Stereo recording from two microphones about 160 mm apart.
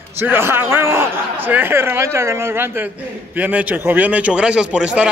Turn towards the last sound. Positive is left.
turn(degrees=-5)  # may be behind; listen again after turning